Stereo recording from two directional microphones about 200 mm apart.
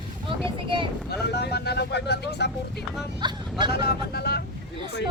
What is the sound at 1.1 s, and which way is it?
Speech, 55° left (ahead or behind).